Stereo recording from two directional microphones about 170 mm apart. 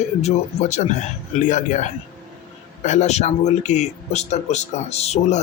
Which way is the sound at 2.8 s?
45° left (ahead or behind).